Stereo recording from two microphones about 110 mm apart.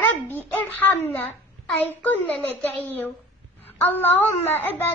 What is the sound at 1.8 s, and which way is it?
A child's voice, 15° left (ahead or behind).